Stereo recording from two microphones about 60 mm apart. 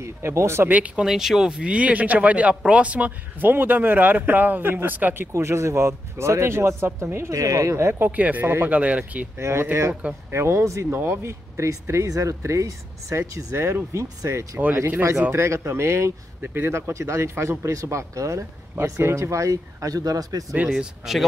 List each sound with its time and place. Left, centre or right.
0.0 s speech: right
0.7 s speech: right
1.0 s speech: centre; by 3.1 s right
3.3 s speech: right
5.3 s speech: right
7.3 s speech: right
8.0 s speech: right
9.4 s speech: right
10.9 s speech: right
15.3 s speech: right
18.9 s speech: right
19.3 s speech: right
20.7 s speech: centre